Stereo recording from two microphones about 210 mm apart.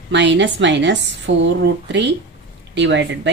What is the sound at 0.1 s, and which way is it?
Speech, 60° right (ahead or behind).